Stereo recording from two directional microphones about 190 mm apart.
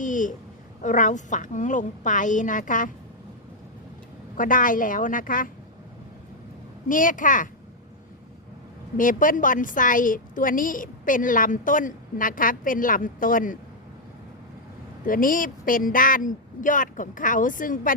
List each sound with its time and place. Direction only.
0.0 s a sound: 45° left (ahead or behind)
0.8 s a woman's voice: 40° left (ahead or behind)
4.4 s a woman's voice: 45° left (ahead or behind)
6.8 s a woman's voice: 45° left (ahead or behind)
9.0 s a woman's voice: 45° left (ahead or behind)
15.0 s a woman's voice: 45° left (ahead or behind)